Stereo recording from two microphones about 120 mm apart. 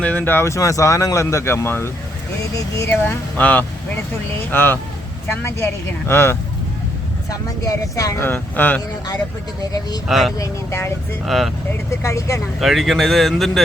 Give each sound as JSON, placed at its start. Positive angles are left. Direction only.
{"t": 0.0, "sound": "speech", "side_deg": 15}
{"t": 3.0, "sound": "speech", "side_deg": 15}
{"t": 10.1, "sound": "speech", "side_deg": 0}
{"t": 10.3, "sound": "speech", "side_deg": 25}
{"t": 11.3, "sound": "speech", "side_deg": 0}
{"t": 11.9, "sound": "speech", "side_deg": 25}
{"t": 12.5, "sound": "speech", "side_deg": 0}